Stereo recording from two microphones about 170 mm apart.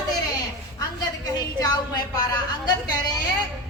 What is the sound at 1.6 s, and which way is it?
A woman's voice, 25° left (ahead or behind).